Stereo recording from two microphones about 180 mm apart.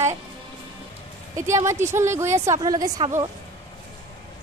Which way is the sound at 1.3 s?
15° right (ahead or behind).